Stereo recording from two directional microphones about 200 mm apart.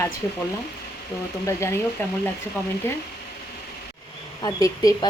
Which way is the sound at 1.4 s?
15° left (ahead or behind).